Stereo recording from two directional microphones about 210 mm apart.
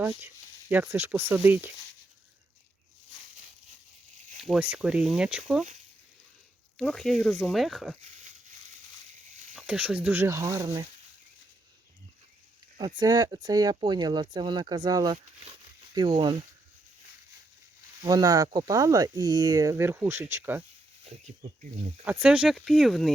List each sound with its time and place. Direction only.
0.7 s speech: 10° right (ahead or behind)
4.4 s speech: 5° right (ahead or behind)
6.7 s speech: centre (ahead or behind)
9.6 s speech: 5° right (ahead or behind)
13.0 s speech: 20° right (ahead or behind)
18.0 s speech: 15° right (ahead or behind)
22.0 s speech: 5° right (ahead or behind)